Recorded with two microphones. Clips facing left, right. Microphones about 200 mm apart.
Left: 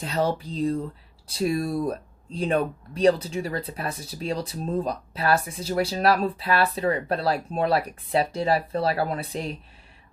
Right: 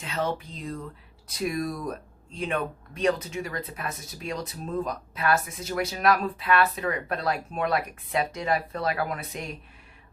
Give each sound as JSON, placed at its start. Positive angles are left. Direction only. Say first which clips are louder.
{"t": 0.0, "sound": "speech", "louder": "left 4 dB", "side_deg": 35}